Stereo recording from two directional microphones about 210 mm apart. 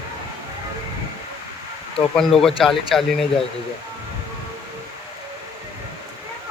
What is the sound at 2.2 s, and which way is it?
Speech, centre (ahead or behind).